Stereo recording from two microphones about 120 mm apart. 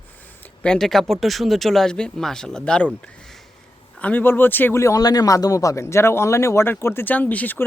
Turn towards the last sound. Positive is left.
turn(degrees=15)  # may be behind; listen again after turning